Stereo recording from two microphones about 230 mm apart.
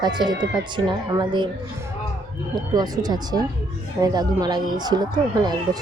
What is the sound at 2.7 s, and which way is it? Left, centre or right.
Speech, centre.